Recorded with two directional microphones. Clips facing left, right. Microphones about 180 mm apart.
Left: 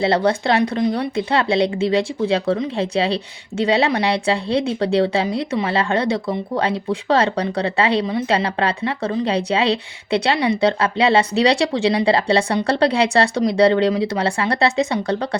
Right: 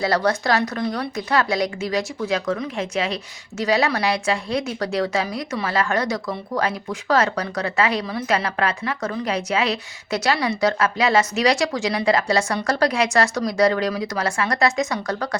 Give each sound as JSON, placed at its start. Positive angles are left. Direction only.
{"t": 0.0, "sound": "speech", "side_deg": 30}